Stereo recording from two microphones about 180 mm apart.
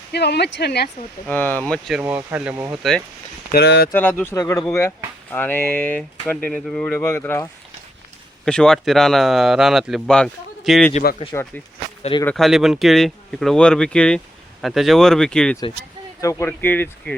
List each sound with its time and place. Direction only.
0.1 s speech: 65° left (ahead or behind)
1.3 s speech: 10° left (ahead or behind)
2.0 s speech: 10° right (ahead or behind)
3.5 s speech: 65° left (ahead or behind)
3.9 s speech: 10° left (ahead or behind)
8.4 s speech: 5° left (ahead or behind)
11.3 s speech: 15° left (ahead or behind)
12.2 s speech: 5° left (ahead or behind)